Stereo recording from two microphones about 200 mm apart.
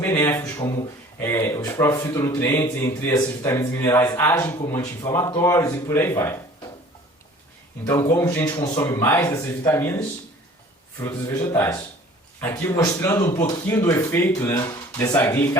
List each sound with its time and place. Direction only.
0.0 s speech: 10° left (ahead or behind)
7.9 s speech: 15° left (ahead or behind)